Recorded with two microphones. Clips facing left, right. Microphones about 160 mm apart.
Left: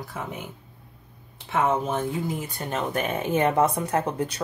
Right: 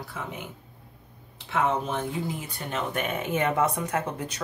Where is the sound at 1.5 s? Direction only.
45° left (ahead or behind).